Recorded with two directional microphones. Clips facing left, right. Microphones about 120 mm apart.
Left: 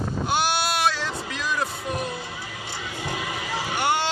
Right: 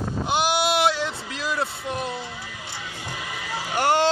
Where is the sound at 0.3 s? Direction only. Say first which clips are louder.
Right 3 dB; 20° right (ahead or behind).